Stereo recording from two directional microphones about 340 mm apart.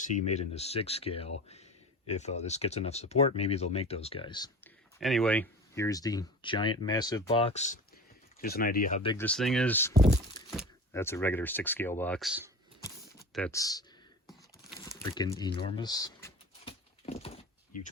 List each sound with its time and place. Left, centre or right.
0.0 s speech: left
4.9 s speech: centre; by 9.1 s left
9.1 s speech: centre
9.9 s speech: centre
10.5 s speech: centre
14.3 s a sound: centre
15.0 s speech: centre
15.6 s a sound: centre